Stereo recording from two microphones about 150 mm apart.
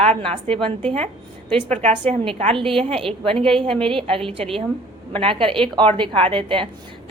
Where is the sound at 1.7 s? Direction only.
50° right (ahead or behind).